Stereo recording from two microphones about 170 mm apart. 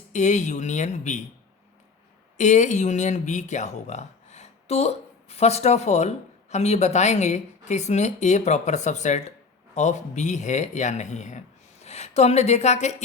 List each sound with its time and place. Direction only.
0.1 s speech: 45° left (ahead or behind)
2.4 s speech: 45° left (ahead or behind)